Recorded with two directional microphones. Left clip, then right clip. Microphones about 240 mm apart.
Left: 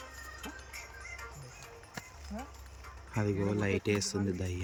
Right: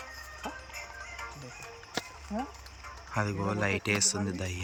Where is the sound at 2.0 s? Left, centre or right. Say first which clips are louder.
Right 10 dB; right.